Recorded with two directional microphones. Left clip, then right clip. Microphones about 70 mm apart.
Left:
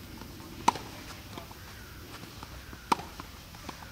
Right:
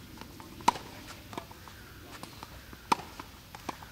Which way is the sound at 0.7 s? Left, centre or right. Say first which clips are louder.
Even; centre.